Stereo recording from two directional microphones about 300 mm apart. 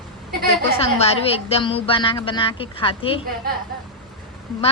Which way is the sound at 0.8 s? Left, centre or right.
Centre.